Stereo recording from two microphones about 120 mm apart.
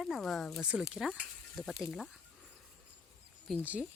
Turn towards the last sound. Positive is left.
turn(degrees=0)  # may be behind; listen again after turning